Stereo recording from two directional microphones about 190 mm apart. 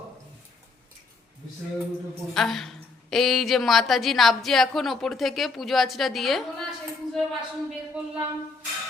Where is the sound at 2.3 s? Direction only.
Centre (ahead or behind).